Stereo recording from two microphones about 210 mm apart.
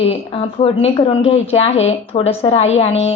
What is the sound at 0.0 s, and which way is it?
A woman's voice, 25° left (ahead or behind).